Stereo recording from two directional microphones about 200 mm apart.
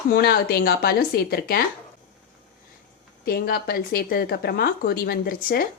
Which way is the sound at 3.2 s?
50° left (ahead or behind).